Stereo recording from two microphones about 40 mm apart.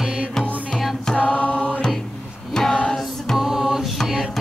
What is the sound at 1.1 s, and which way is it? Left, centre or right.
Chant, left.